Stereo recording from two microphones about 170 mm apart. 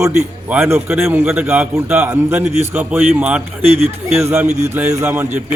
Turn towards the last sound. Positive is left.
turn(degrees=-15)  # may be behind; listen again after turning